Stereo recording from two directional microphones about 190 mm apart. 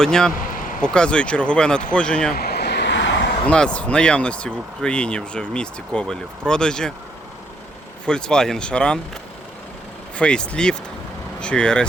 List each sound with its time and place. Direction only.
0.0 s speech: 5° left (ahead or behind)
2.3 s vehicle: 55° left (ahead or behind); by 3.2 s 70° left (ahead or behind)
3.4 s speech: 5° left (ahead or behind)
8.0 s speech: 5° left (ahead or behind)
10.2 s speech: 5° left (ahead or behind)